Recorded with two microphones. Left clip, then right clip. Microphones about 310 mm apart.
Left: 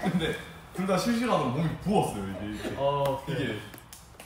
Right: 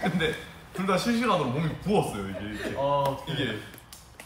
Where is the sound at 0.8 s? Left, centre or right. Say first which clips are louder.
Right 2 dB; centre.